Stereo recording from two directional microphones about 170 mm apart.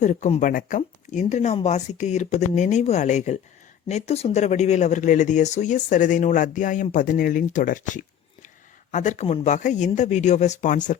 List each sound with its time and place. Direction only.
0.0 s speech: 45° left (ahead or behind)